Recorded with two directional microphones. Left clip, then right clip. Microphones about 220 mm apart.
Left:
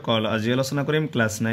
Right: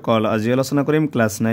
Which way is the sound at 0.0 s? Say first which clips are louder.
Right 5 dB; 55° right (ahead or behind).